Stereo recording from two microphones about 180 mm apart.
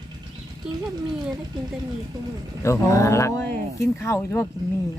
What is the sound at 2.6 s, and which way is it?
Speech, 15° left (ahead or behind).